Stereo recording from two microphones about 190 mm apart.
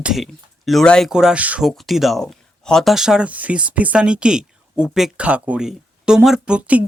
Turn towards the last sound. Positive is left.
turn(degrees=-5)  # may be behind; listen again after turning